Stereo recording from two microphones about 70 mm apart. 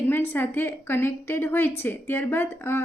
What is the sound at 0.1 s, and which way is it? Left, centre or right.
A woman's voice, left.